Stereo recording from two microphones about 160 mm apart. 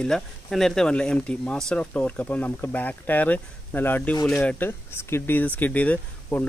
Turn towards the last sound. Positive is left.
turn(degrees=10)  # may be behind; listen again after turning